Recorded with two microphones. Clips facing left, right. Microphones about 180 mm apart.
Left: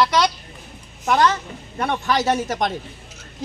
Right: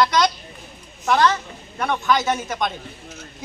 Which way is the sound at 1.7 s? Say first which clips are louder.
Right 1 dB; 30° left (ahead or behind).